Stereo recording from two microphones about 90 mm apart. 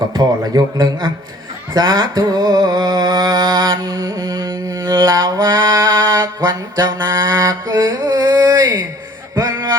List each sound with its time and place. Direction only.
0.1 s music: 50° right (ahead or behind)
6.4 s music: 50° right (ahead or behind)
7.2 s music: 40° right (ahead or behind)